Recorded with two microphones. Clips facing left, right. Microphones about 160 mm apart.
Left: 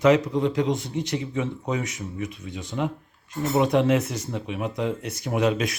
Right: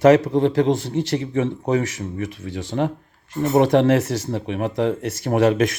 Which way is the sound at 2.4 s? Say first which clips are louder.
Right 6 dB; 90° right.